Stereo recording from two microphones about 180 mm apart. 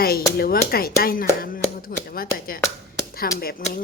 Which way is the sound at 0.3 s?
60° left (ahead or behind).